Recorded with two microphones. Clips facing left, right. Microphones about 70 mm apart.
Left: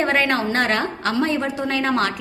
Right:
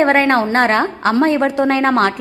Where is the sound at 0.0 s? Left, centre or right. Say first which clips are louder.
Right 7 dB; right.